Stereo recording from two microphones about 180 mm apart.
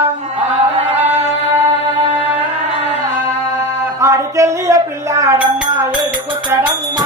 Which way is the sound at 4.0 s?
15° right (ahead or behind).